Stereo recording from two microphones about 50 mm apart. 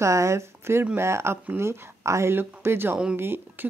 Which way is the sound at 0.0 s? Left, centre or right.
Right.